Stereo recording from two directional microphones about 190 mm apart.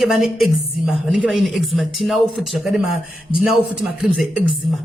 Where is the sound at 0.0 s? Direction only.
Centre (ahead or behind).